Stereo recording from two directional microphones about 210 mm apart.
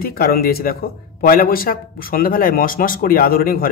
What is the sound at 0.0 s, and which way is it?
Speech, 45° left (ahead or behind).